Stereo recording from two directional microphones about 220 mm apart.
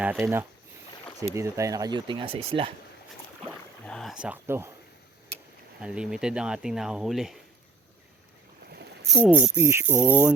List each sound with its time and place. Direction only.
0.0 s speech: 5° right (ahead or behind); by 2.7 s 25° right (ahead or behind)
3.4 s rowboat: 5° left (ahead or behind)
5.8 s speech: 5° right (ahead or behind)
9.2 s speech: 10° right (ahead or behind)